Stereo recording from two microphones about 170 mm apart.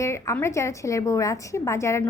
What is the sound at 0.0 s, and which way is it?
A woman's voice, 15° left (ahead or behind).